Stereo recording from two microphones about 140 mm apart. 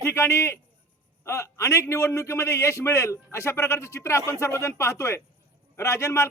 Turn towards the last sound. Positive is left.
turn(degrees=20)  # may be behind; listen again after turning